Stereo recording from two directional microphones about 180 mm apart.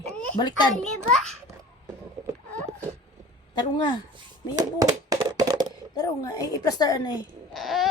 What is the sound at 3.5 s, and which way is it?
Speech, 25° left (ahead or behind).